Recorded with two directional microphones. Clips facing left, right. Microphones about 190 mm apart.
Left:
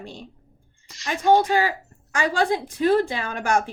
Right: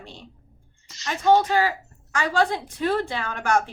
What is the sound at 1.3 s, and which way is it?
Speech, 15° left (ahead or behind).